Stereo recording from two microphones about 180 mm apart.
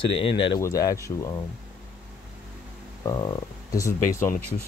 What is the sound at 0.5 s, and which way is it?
Speech, 20° left (ahead or behind).